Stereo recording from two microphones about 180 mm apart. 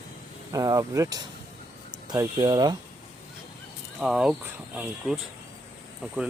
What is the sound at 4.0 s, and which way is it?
Speech, 5° right (ahead or behind).